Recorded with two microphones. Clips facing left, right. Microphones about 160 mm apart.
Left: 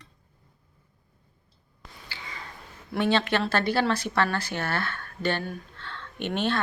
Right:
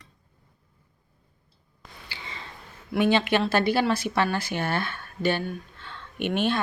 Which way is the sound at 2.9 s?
10° right (ahead or behind).